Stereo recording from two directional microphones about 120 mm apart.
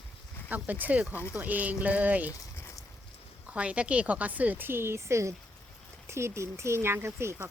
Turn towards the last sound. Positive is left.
turn(degrees=-20)  # may be behind; listen again after turning